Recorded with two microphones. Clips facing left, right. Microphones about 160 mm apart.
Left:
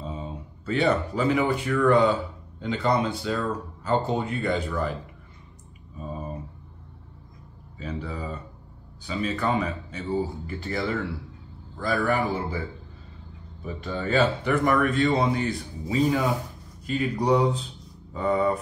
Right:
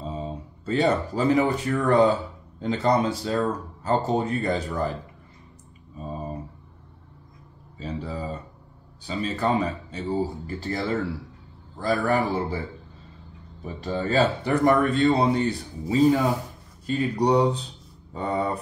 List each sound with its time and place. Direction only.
0.0 s speech: 35° right (ahead or behind)
7.8 s speech: 30° right (ahead or behind)
13.7 s speech: 35° right (ahead or behind)